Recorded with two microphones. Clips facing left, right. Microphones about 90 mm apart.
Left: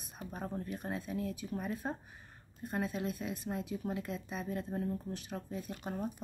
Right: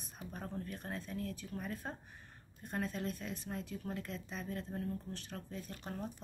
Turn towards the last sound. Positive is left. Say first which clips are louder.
# left 5 dB
turn(degrees=10)  # may be behind; listen again after turning